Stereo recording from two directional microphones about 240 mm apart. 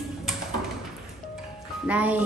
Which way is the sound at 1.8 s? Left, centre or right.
Centre.